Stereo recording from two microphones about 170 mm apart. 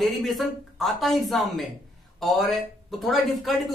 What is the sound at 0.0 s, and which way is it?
Speech, centre (ahead or behind).